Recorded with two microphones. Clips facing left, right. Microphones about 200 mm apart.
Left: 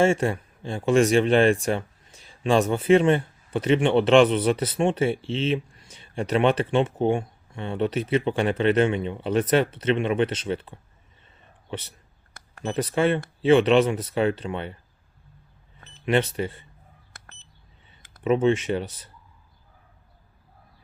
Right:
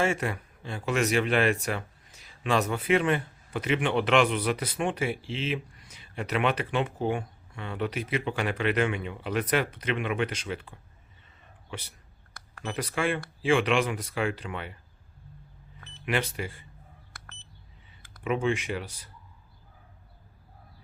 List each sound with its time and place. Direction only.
0.0 s speech: 25° left (ahead or behind)
12.3 s speech: 25° left (ahead or behind)
16.0 s speech: 25° left (ahead or behind)
18.0 s clicking: 25° left (ahead or behind)
18.4 s speech: 30° left (ahead or behind)